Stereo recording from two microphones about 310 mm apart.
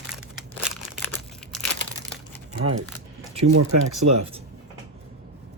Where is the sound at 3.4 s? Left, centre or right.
Right.